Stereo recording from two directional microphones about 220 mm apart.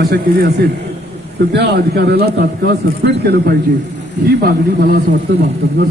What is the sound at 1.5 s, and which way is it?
A man's voice, 50° right (ahead or behind).